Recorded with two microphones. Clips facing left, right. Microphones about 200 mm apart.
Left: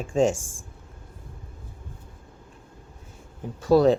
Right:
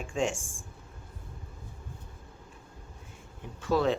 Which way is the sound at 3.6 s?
40° left (ahead or behind).